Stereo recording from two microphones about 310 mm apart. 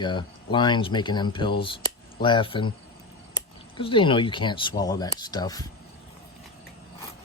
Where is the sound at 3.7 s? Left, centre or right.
Centre.